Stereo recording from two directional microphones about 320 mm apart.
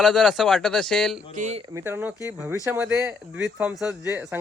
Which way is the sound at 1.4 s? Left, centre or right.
Right.